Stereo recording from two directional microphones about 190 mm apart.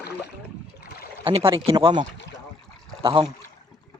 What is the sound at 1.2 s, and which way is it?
Speech, 30° right (ahead or behind).